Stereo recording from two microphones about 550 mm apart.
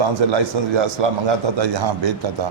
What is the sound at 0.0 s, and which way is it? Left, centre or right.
A man's voice, right.